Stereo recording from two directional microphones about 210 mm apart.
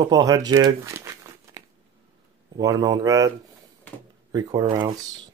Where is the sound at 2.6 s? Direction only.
15° right (ahead or behind).